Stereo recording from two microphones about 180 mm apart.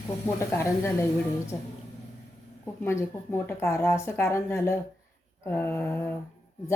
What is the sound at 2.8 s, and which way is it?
Speech, 15° left (ahead or behind).